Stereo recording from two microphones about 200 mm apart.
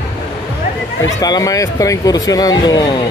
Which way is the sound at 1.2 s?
20° left (ahead or behind).